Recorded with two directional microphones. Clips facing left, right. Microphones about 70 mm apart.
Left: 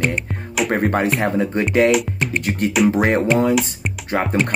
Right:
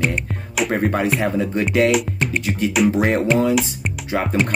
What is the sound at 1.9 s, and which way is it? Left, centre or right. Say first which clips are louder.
Music: left 1 dB; centre.